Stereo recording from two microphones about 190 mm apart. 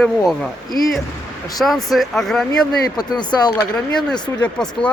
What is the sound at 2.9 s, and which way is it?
Speech, 20° left (ahead or behind).